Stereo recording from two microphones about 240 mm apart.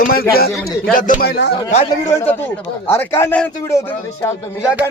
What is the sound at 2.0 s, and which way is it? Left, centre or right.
A man's voice, centre.